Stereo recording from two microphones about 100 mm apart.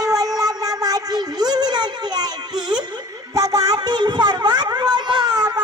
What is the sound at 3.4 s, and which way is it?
Music, 40° right (ahead or behind).